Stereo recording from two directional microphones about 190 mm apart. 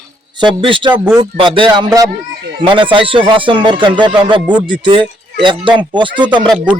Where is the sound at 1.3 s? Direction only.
25° right (ahead or behind).